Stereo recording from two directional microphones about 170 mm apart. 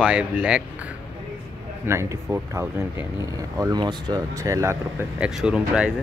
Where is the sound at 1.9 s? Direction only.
15° right (ahead or behind).